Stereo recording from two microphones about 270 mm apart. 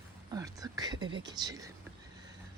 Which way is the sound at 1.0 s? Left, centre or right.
Right.